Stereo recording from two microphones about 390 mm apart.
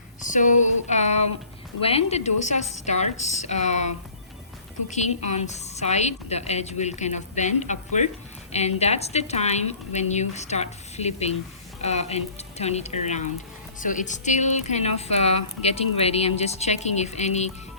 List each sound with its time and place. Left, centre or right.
0.2 s speech: centre
4.9 s speech: centre